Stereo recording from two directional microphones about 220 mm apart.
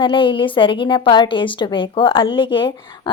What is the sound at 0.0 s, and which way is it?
Speech, 20° left (ahead or behind).